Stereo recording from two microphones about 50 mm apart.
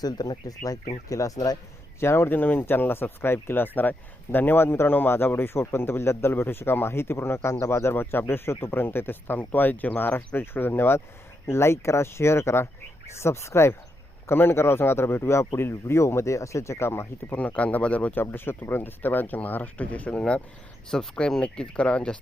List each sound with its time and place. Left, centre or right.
2.0 s speech: left
7.9 s speech: left
11.4 s speech: left
14.3 s speech: left
15.7 s speech: left
16.9 s speech: left
17.3 s speech: left
18.1 s speech: left
21.2 s speech: centre